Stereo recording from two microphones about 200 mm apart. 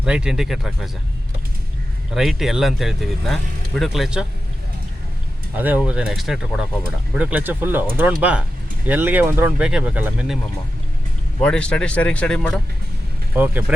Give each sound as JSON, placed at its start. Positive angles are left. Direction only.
{"t": 0.0, "sound": "speech", "side_deg": -5}
{"t": 2.1, "sound": "speech", "side_deg": 0}
{"t": 5.5, "sound": "speech", "side_deg": -10}
{"t": 11.3, "sound": "speech", "side_deg": 5}
{"t": 13.3, "sound": "speech", "side_deg": -10}